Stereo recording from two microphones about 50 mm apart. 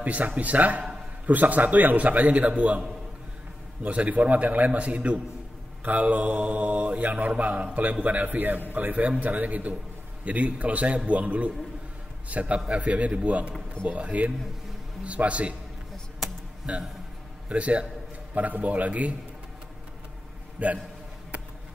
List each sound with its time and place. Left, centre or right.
0.0 s a man's voice: right
3.8 s mantra: right
8.7 s a man's voice: right
10.2 s mantra: right
17.5 s mantra: right
18.3 s a man's voice: right
20.5 s a man's voice: right